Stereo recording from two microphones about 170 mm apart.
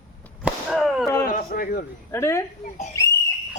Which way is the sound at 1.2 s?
55° left (ahead or behind).